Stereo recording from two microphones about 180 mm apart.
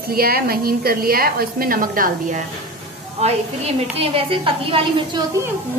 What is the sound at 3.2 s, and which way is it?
A woman's voice, 35° right (ahead or behind).